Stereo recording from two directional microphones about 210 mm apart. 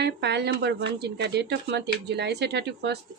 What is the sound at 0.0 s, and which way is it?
Speech, 55° right (ahead or behind).